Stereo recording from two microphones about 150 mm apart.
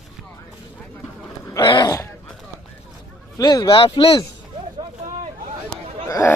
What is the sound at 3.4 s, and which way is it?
Speech, 25° left (ahead or behind).